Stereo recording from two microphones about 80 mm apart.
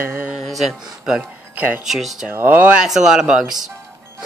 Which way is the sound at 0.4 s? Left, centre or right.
Centre.